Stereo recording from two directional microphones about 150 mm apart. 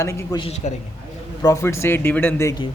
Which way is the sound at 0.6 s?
50° left (ahead or behind).